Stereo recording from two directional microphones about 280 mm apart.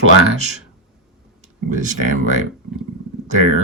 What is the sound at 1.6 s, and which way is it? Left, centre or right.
Speech, right.